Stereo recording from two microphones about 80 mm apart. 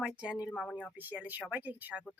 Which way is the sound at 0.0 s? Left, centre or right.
Centre.